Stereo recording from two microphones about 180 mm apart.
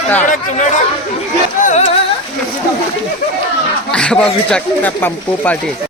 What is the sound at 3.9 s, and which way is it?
Speech, 5° left (ahead or behind).